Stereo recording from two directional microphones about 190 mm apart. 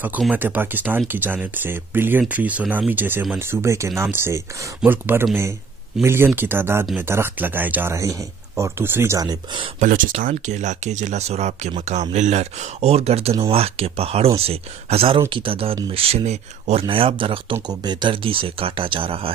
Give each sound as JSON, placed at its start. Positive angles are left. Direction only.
{"t": 0.0, "sound": "speech", "side_deg": -10}
{"t": 9.8, "sound": "speech", "side_deg": -45}